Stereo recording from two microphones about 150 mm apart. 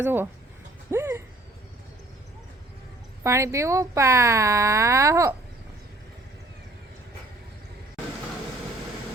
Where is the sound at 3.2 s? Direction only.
20° right (ahead or behind).